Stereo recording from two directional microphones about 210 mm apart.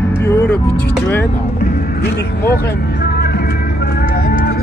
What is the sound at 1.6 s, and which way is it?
Speech, 45° left (ahead or behind).